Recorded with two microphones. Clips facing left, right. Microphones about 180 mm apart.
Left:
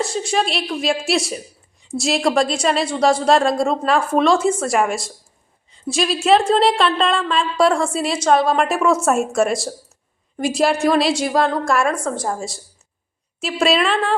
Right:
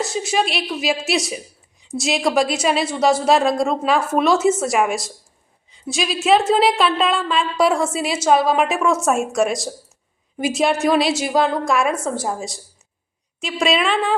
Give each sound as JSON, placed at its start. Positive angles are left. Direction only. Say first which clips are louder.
{"t": 0.0, "sound": "a woman's voice", "louder": "even", "side_deg": 0}